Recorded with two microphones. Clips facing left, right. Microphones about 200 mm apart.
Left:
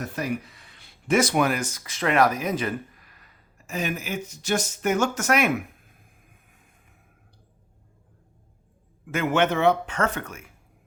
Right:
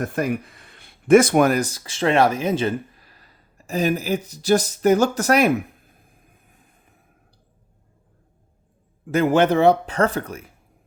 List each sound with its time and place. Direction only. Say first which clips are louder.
0.0 s speech: right 6 dB; 50° right (ahead or behind); by 6.7 s 35° right (ahead or behind)
9.0 s speech: right 6 dB; 35° right (ahead or behind)